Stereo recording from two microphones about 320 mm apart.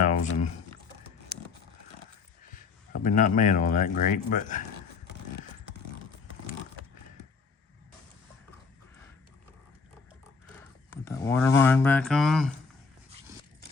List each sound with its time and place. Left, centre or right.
0.0 s speech: left
1.3 s a sound: left
2.6 s speech: left
11.0 s speech: centre